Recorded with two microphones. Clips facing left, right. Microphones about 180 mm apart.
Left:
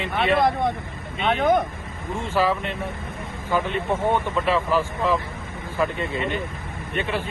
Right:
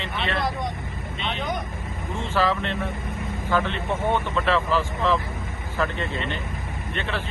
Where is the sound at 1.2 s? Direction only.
50° left (ahead or behind).